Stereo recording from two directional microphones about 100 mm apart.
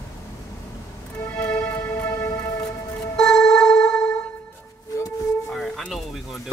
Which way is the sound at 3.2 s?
5° left (ahead or behind).